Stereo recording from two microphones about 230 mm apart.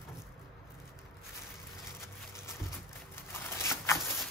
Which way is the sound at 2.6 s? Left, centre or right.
Centre.